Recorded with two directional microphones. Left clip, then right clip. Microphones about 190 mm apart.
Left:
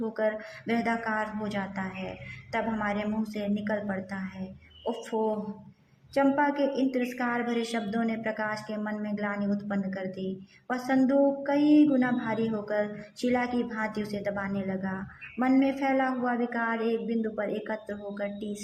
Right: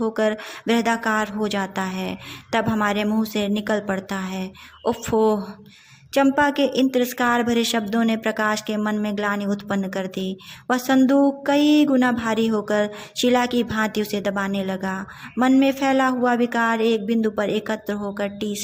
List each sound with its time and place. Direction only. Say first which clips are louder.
0.0 s speech: right 7 dB; 25° right (ahead or behind)
6.1 s speech: right 7 dB; 25° right (ahead or behind)